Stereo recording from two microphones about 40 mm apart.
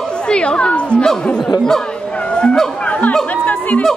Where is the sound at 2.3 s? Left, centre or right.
Left.